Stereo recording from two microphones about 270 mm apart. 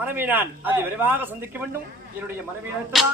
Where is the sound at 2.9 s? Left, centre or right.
Centre.